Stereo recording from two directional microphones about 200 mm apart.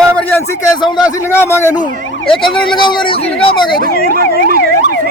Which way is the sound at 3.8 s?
50° right (ahead or behind).